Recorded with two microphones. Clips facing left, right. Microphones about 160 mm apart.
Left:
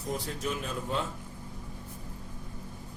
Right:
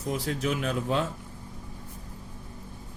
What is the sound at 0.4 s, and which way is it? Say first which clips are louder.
Speech: right 6 dB; 80° right.